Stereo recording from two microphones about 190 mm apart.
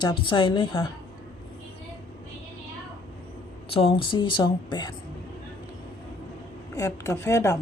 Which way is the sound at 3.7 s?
30° left (ahead or behind).